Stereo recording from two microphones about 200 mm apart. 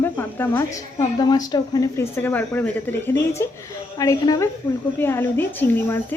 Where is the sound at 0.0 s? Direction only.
10° left (ahead or behind).